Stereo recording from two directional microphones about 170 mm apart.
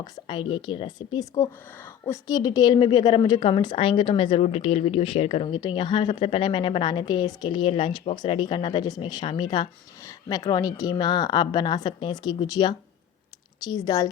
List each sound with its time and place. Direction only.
0.0 s a woman's voice: 30° left (ahead or behind)